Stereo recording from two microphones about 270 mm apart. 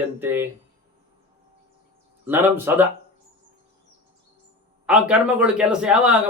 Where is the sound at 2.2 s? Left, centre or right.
Centre.